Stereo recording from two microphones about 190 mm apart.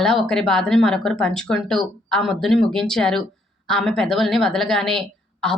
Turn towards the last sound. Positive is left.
turn(degrees=0)  # may be behind; listen again after turning